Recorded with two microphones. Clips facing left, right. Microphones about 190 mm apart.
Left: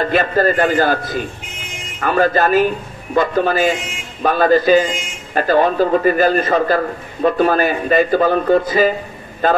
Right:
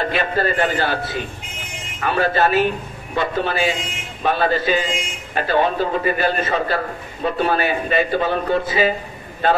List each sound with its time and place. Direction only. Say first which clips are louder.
0.0 s a man's voice: left 5 dB; 45° left (ahead or behind)